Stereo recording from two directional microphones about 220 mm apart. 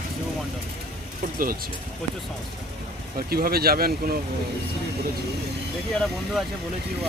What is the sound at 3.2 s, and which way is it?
Speech, 40° right (ahead or behind).